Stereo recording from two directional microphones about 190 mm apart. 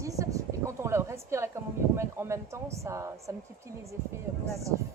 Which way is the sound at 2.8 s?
15° right (ahead or behind).